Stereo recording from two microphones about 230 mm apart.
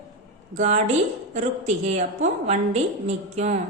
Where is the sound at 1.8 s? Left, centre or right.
Right.